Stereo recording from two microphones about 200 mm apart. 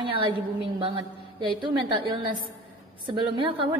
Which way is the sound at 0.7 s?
25° right (ahead or behind).